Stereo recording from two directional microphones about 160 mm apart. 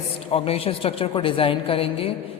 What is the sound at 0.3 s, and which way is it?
A woman's voice, 40° left (ahead or behind).